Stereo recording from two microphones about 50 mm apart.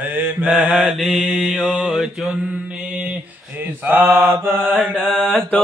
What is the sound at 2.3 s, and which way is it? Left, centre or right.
Mantra, centre.